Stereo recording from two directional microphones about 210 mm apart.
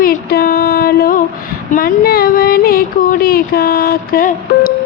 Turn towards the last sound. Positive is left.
turn(degrees=45)  # may be behind; listen again after turning